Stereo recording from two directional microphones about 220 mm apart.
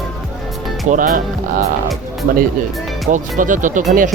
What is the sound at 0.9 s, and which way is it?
Speech, 40° right (ahead or behind).